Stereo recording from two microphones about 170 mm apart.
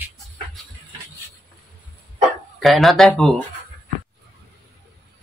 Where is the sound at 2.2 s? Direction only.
Centre (ahead or behind).